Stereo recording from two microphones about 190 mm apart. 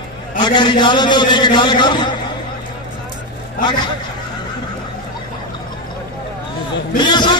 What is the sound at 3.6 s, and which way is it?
Speech, 25° left (ahead or behind).